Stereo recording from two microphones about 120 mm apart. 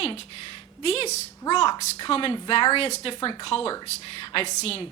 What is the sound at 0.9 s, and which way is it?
Speech, 60° left (ahead or behind).